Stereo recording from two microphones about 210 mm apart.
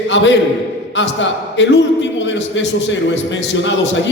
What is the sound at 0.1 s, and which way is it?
A man's voice, 55° left (ahead or behind).